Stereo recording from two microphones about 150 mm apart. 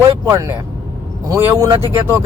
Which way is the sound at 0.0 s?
20° right (ahead or behind).